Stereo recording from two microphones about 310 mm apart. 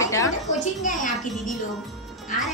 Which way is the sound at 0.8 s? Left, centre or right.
Left.